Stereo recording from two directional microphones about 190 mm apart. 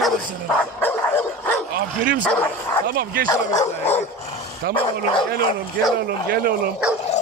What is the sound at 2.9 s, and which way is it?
Speech, 55° right (ahead or behind).